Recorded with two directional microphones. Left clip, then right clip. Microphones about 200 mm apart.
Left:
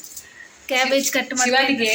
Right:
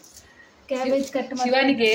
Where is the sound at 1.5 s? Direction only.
45° right (ahead or behind).